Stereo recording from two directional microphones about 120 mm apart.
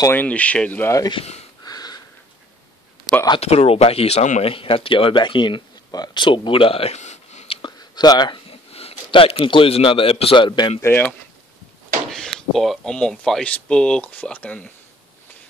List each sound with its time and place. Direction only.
0.0 s speech: 15° left (ahead or behind)
1.1 s speech: 60° left (ahead or behind)
1.6 s wheeze: 35° left (ahead or behind)
3.3 s speech: 55° left (ahead or behind)
4.5 s speech: 50° left (ahead or behind); by 7.5 s 70° left (ahead or behind)
7.6 s a sound: 35° left (ahead or behind)
8.5 s a man's voice: 55° left (ahead or behind)
10.8 s speech: 20° left (ahead or behind)
12.1 s speech: 5° left (ahead or behind)